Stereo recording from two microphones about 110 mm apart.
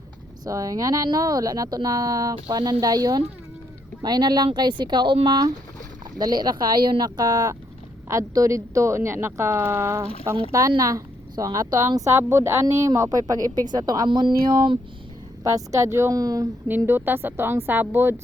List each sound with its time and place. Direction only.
0.4 s a woman's voice: 30° right (ahead or behind)
15.4 s a woman's voice: 30° right (ahead or behind)
16.6 s a woman's voice: 20° right (ahead or behind)